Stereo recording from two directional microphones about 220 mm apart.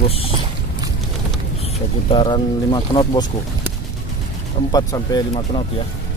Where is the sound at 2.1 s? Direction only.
20° left (ahead or behind).